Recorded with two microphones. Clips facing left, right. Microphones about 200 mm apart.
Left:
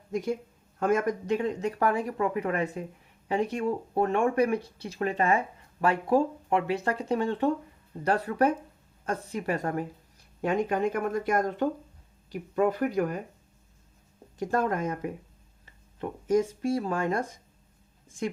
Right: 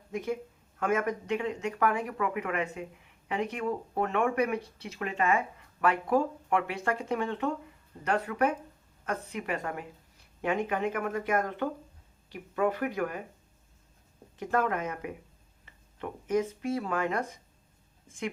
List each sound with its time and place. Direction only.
0.8 s speech: 35° left (ahead or behind)
14.3 s speech: 35° left (ahead or behind)